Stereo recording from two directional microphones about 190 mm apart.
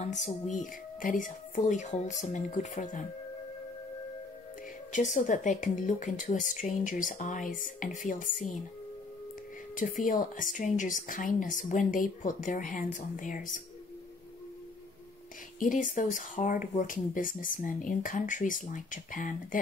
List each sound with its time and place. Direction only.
0.0 s speech: 40° left (ahead or behind)
4.9 s speech: 40° left (ahead or behind)
9.8 s speech: 45° left (ahead or behind)
15.6 s speech: 45° left (ahead or behind)